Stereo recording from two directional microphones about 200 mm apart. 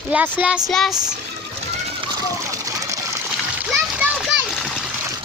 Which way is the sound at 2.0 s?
20° right (ahead or behind).